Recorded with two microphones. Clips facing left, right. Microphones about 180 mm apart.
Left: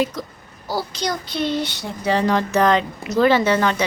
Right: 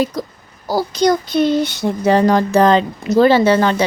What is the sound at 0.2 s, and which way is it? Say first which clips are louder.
Speech: right 6 dB; 40° right (ahead or behind).